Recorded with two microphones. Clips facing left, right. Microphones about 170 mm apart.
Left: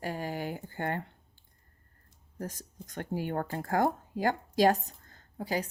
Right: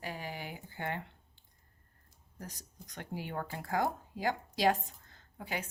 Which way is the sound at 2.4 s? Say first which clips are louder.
Left 8 dB; 45° left (ahead or behind).